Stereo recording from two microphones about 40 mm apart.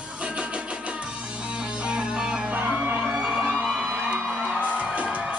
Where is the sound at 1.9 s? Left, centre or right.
Right.